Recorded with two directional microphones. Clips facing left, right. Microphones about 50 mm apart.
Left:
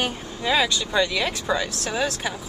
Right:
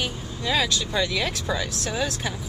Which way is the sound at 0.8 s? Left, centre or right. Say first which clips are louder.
Left 3 dB; centre.